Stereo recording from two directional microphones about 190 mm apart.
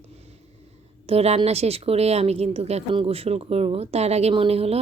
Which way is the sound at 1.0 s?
30° right (ahead or behind).